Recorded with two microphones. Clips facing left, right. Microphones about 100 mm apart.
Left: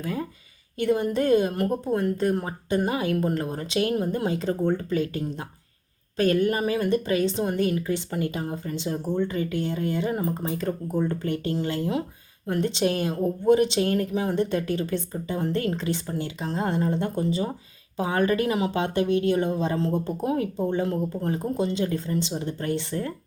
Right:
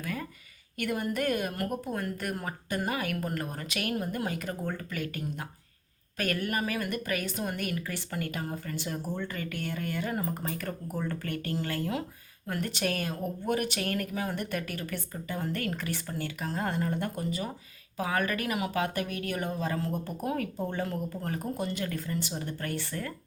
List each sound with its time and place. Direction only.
0.0 s a woman's voice: 25° left (ahead or behind)